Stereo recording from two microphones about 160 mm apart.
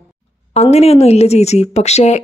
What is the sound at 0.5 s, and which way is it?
Speech, 40° left (ahead or behind).